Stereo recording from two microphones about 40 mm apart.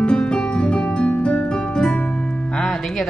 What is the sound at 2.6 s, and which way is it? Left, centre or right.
Music, centre.